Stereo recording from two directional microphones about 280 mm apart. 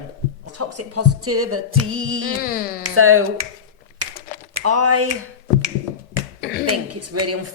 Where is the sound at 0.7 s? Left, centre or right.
Right.